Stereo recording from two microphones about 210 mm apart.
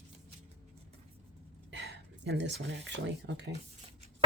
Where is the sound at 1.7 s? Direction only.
50° right (ahead or behind).